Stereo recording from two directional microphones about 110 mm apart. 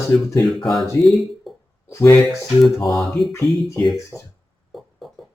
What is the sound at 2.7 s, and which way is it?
Speech, centre (ahead or behind).